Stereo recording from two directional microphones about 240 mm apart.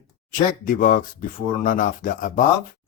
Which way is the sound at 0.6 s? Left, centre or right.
Left.